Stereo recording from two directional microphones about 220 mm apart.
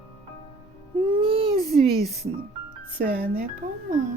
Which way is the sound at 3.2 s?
45° right (ahead or behind).